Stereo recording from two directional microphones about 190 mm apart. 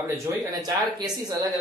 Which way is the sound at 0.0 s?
15° right (ahead or behind).